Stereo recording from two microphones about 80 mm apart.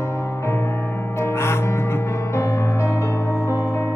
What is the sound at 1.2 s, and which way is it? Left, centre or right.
Music, left.